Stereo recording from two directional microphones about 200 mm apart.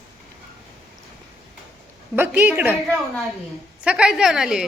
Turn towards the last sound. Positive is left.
turn(degrees=-5)  # may be behind; listen again after turning